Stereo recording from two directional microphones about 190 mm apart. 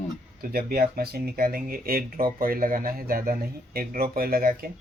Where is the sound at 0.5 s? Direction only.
50° right (ahead or behind).